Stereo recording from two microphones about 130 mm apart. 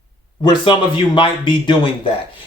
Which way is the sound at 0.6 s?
40° left (ahead or behind).